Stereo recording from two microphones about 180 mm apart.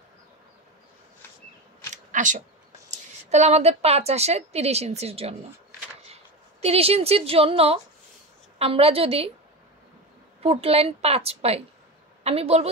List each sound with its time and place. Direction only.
2.1 s a woman's voice: 45° right (ahead or behind)
6.6 s a woman's voice: 35° right (ahead or behind)
10.4 s a woman's voice: 35° right (ahead or behind)